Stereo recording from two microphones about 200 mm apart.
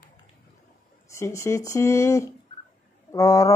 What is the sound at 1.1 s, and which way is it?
A woman's voice, 15° left (ahead or behind).